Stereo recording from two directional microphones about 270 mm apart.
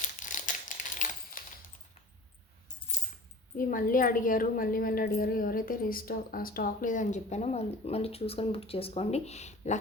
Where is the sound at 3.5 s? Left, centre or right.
Left.